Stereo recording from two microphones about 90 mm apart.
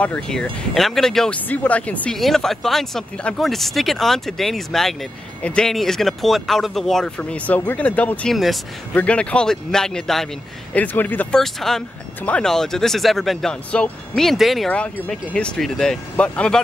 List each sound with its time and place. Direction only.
0.0 s speech: 10° left (ahead or behind)
1.5 s speech: 15° left (ahead or behind)
2.1 s speech: 5° left (ahead or behind)
7.2 s speech: 15° left (ahead or behind)
8.3 s speech: centre (ahead or behind)
8.9 s speech: 15° left (ahead or behind)
10.7 s speech: 20° left (ahead or behind)
11.3 s speech: 5° left (ahead or behind)
15.0 s speech: 10° left (ahead or behind)